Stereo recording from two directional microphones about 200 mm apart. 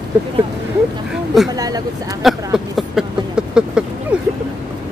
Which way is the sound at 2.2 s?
Centre (ahead or behind).